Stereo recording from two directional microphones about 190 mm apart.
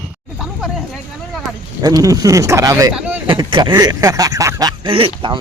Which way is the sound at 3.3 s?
25° right (ahead or behind).